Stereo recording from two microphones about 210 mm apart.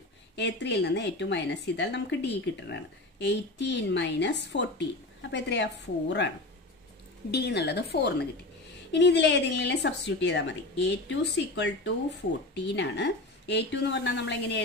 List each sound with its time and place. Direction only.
0.4 s a woman's voice: 55° left (ahead or behind)